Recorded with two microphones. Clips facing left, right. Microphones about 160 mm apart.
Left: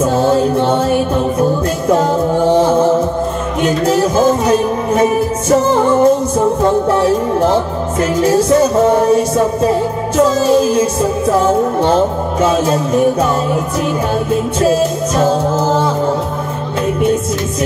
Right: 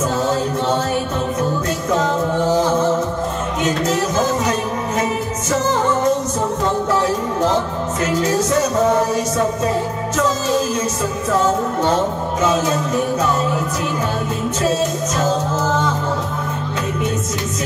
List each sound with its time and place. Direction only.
5.5 s music: 30° left (ahead or behind)
15.1 s music: 30° left (ahead or behind)